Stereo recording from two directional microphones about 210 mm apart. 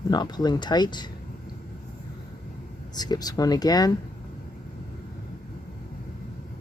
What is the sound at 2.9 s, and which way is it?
Speech, 20° left (ahead or behind).